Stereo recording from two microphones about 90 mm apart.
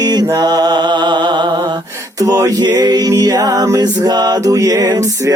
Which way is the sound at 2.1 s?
40° right (ahead or behind).